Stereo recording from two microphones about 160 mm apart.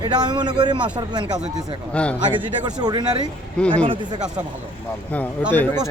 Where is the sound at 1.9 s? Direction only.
10° left (ahead or behind).